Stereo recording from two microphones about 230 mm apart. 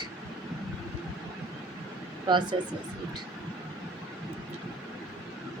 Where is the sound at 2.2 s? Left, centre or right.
Centre.